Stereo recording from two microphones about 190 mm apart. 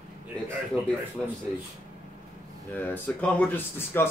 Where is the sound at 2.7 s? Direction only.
10° left (ahead or behind).